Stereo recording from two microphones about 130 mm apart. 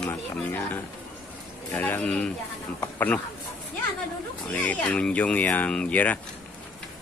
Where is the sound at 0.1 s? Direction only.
15° left (ahead or behind).